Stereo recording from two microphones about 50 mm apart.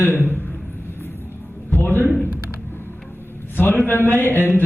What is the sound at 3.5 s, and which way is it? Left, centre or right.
Speech, left.